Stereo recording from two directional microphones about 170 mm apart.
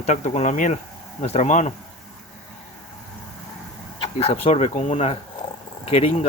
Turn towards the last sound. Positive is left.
turn(degrees=40)  # may be behind; listen again after turning